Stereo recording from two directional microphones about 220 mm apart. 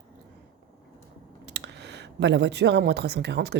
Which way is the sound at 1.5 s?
50° right (ahead or behind).